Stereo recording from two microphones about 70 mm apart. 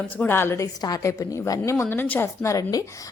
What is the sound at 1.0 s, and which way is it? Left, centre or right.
Speech, left.